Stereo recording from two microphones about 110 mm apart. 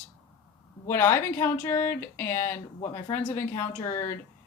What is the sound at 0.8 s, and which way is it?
A woman's voice, 20° left (ahead or behind).